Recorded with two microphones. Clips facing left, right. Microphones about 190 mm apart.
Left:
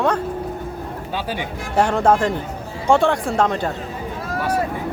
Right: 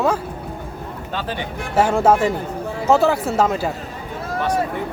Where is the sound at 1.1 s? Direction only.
10° left (ahead or behind).